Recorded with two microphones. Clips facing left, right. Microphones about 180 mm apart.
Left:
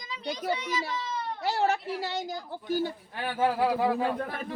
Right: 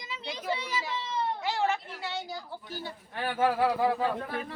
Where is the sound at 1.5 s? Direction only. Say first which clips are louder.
Left 7 dB; 40° left (ahead or behind).